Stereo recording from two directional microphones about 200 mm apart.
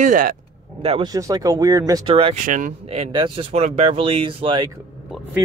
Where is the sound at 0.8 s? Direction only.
25° right (ahead or behind).